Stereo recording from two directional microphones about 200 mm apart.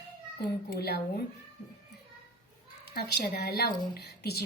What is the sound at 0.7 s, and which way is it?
Speech, 50° left (ahead or behind).